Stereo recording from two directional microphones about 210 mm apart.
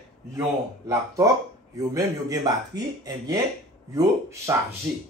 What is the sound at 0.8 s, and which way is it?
Speech, 15° right (ahead or behind).